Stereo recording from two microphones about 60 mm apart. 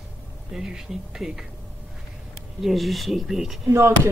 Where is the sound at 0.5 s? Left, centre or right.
Centre.